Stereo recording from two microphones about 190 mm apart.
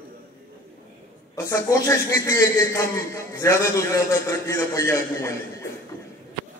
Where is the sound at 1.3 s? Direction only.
15° left (ahead or behind).